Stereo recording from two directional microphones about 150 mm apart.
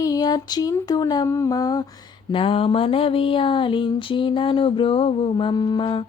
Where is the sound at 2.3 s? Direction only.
35° left (ahead or behind).